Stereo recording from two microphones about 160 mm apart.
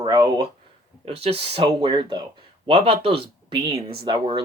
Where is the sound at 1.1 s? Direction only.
40° right (ahead or behind).